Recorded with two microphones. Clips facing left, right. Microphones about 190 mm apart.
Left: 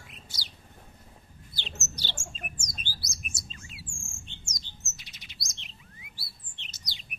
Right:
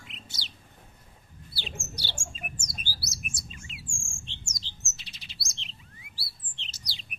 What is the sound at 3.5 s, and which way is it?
Chirp, 20° right (ahead or behind).